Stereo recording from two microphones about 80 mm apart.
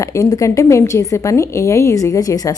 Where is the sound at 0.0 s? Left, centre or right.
Left.